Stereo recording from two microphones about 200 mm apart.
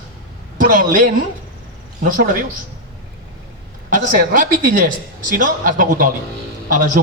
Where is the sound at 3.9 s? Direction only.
40° right (ahead or behind).